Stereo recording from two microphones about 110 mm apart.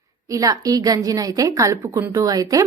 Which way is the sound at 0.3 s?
30° right (ahead or behind).